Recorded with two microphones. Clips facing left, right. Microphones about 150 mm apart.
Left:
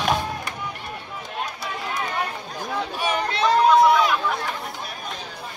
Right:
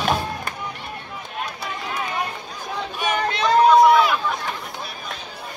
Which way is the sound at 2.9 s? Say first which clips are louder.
Right 3 dB; 30° left (ahead or behind).